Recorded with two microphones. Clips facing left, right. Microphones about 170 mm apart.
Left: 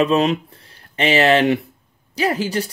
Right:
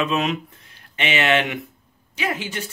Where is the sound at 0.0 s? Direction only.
35° left (ahead or behind).